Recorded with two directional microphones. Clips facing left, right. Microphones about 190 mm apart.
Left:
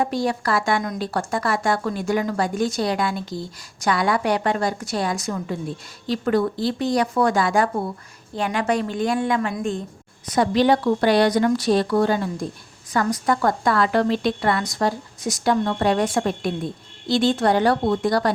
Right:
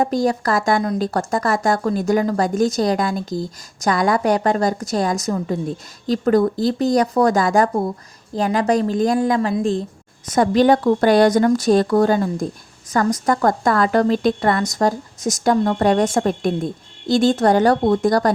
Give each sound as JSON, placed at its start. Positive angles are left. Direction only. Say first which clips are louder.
{"t": 0.0, "sound": "a woman's voice", "louder": "right 4 dB", "side_deg": -40}
{"t": 10.2, "sound": "a woman's voice", "louder": "right 3 dB", "side_deg": -45}